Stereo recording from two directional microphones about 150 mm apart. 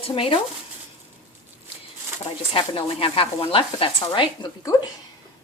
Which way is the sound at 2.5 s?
40° left (ahead or behind).